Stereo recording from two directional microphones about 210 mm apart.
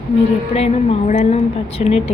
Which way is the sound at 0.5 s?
30° left (ahead or behind).